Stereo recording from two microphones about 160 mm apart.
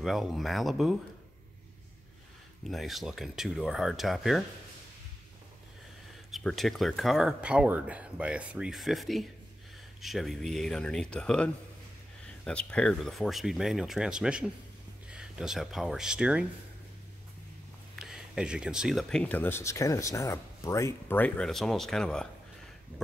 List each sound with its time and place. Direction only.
0.0 s speech: centre (ahead or behind)
2.7 s speech: centre (ahead or behind)
6.3 s speech: centre (ahead or behind)
17.9 s speech: 5° right (ahead or behind)